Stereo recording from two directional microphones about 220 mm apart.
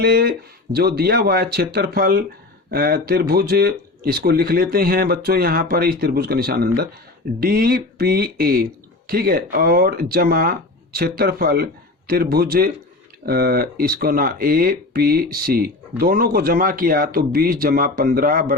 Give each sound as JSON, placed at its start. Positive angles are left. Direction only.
{"t": 0.0, "sound": "speech", "side_deg": -45}